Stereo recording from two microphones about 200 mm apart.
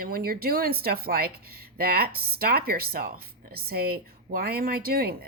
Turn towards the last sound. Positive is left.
turn(degrees=-50)  # may be behind; listen again after turning